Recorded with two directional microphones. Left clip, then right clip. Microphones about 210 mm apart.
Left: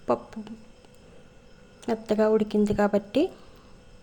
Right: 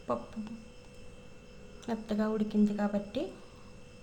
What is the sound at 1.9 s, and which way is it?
Speech, 30° left (ahead or behind).